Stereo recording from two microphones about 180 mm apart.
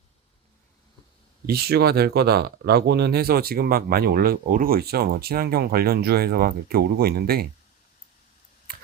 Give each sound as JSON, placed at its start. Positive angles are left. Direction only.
{"t": 1.5, "sound": "speech", "side_deg": -60}